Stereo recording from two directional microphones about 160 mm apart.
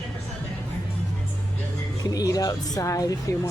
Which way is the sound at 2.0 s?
20° left (ahead or behind).